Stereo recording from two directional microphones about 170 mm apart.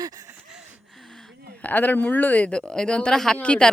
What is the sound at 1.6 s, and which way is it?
Speech, 10° left (ahead or behind).